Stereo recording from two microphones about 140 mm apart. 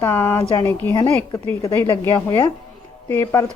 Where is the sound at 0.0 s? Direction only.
15° left (ahead or behind).